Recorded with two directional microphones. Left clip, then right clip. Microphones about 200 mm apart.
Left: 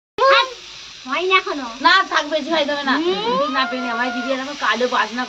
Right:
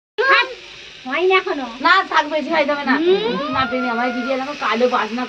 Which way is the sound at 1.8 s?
10° right (ahead or behind).